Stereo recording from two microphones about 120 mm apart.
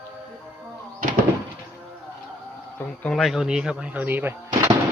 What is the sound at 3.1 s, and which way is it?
Speech, centre (ahead or behind).